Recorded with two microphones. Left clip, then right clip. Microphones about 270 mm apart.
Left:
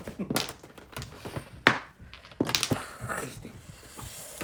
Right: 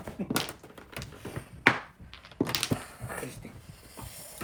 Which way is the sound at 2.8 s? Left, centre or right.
Left.